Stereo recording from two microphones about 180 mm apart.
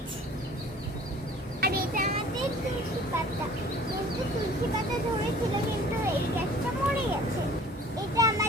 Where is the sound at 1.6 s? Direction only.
60° right (ahead or behind).